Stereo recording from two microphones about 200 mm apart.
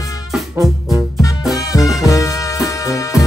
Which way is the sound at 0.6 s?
15° right (ahead or behind).